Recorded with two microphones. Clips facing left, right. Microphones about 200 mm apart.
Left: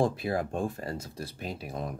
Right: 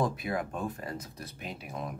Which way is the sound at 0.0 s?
30° left (ahead or behind).